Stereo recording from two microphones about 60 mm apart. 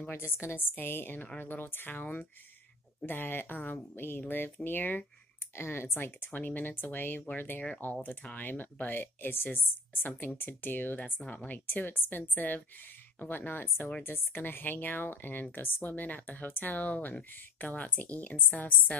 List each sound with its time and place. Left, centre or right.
0.1 s speech: left
3.1 s speech: left
5.6 s speech: left